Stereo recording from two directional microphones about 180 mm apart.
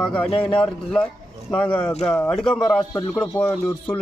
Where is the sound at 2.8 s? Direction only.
25° left (ahead or behind).